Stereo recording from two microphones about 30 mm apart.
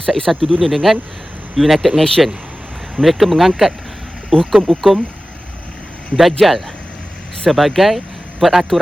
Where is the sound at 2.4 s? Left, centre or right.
Centre.